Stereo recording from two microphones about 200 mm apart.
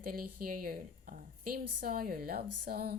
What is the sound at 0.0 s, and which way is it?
Speech, 45° right (ahead or behind).